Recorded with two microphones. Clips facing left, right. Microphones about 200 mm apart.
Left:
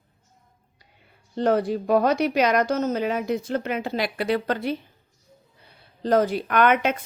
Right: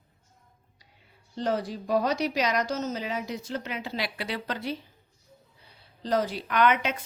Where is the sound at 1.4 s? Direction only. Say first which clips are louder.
Left 7 dB; 60° left (ahead or behind).